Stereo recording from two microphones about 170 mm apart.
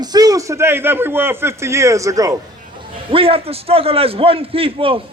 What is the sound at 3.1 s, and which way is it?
A man's voice, 35° right (ahead or behind).